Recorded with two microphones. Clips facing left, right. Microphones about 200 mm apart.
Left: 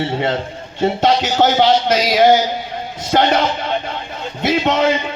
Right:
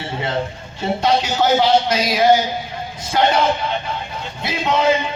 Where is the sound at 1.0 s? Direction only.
50° left (ahead or behind).